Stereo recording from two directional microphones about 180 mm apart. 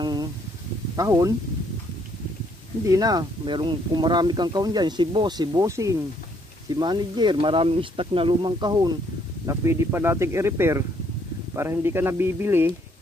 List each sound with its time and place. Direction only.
0.0 s a sound: 25° right (ahead or behind)
0.9 s speech: 20° right (ahead or behind)
2.8 s speech: 20° right (ahead or behind)